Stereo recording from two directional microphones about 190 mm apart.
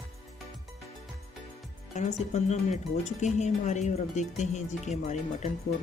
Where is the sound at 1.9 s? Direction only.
35° left (ahead or behind).